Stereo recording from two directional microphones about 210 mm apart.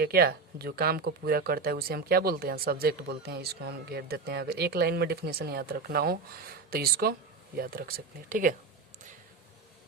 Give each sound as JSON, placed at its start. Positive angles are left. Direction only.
{"t": 0.0, "sound": "speech", "side_deg": -45}